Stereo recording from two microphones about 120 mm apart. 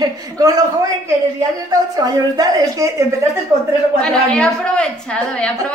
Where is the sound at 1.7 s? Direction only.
35° right (ahead or behind).